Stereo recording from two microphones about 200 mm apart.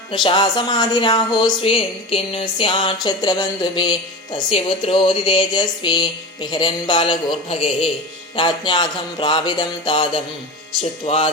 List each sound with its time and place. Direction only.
0.1 s speech: 25° left (ahead or behind)